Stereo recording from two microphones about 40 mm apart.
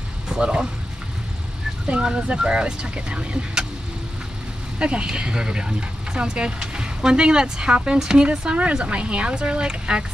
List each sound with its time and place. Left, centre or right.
0.3 s a sound: right
1.9 s speech: right
4.7 s speech: right